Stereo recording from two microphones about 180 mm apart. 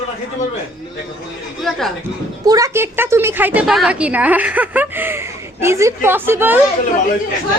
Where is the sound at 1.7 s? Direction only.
Centre (ahead or behind).